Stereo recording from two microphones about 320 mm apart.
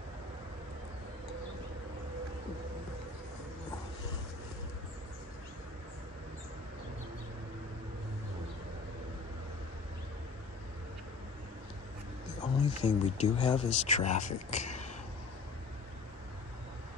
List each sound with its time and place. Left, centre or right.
12.6 s speech: centre